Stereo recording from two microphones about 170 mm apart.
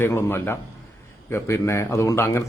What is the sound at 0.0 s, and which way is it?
A man's voice, 15° left (ahead or behind).